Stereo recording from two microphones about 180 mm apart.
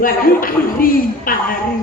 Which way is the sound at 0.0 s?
50° left (ahead or behind).